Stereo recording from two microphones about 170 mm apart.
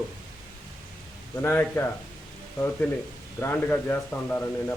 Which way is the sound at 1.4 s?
10° left (ahead or behind).